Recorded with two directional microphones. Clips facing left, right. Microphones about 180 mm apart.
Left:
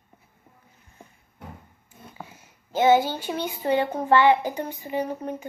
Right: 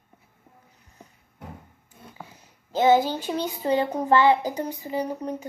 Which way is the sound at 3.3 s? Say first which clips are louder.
Even; 35° right (ahead or behind).